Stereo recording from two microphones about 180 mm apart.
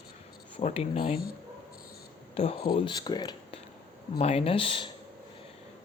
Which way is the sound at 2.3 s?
35° left (ahead or behind).